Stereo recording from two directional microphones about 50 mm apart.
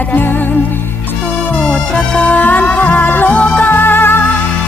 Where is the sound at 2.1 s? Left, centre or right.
Left.